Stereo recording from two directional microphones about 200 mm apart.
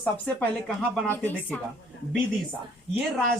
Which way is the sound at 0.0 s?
5° left (ahead or behind).